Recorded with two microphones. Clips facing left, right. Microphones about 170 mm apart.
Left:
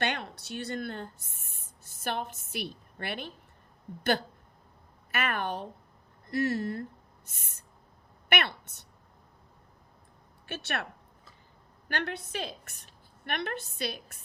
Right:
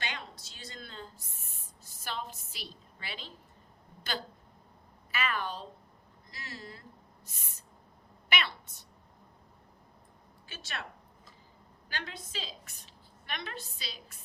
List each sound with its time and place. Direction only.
0.0 s a sound: 60° left (ahead or behind)
2.0 s a woman's voice: 60° left (ahead or behind)
5.1 s a woman's voice: 55° left (ahead or behind)
8.3 s a woman's voice: 60° left (ahead or behind)
10.4 s a woman's voice: 65° left (ahead or behind)
11.9 s a woman's voice: 65° left (ahead or behind)